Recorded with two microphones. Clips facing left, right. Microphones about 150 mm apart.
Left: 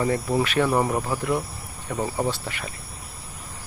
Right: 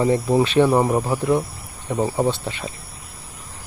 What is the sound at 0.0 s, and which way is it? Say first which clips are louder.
Speech: right 5 dB; 25° right (ahead or behind).